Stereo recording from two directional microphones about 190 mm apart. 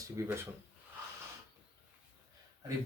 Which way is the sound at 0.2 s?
15° right (ahead or behind).